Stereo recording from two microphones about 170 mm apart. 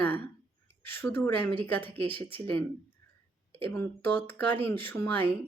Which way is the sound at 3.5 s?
15° left (ahead or behind).